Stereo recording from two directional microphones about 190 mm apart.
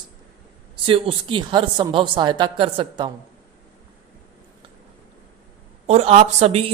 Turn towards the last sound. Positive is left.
turn(degrees=-35)  # may be behind; listen again after turning